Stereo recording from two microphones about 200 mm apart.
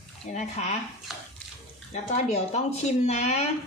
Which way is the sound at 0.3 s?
35° left (ahead or behind).